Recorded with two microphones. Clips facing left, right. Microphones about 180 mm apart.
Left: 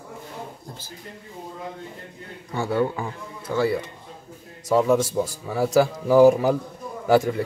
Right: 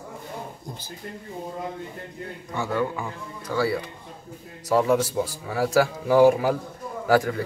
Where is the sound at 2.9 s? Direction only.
25° left (ahead or behind).